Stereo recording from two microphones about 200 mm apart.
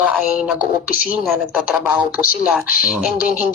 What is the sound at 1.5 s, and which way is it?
Speech, 5° right (ahead or behind).